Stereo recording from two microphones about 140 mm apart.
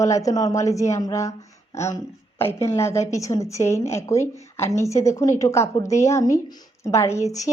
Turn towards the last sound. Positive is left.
turn(degrees=25)  # may be behind; listen again after turning